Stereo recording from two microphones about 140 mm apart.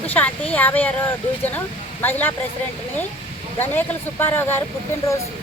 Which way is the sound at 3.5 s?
15° left (ahead or behind).